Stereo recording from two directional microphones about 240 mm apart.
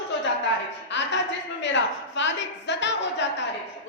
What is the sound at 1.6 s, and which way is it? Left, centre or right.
A woman's voice, left.